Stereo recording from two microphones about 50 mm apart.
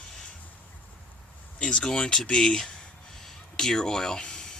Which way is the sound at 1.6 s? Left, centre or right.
Centre.